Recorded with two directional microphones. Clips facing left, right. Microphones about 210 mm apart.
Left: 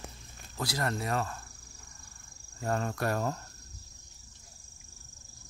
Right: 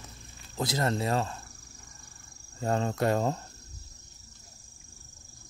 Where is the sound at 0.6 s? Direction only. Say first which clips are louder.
Right 4 dB; 20° right (ahead or behind).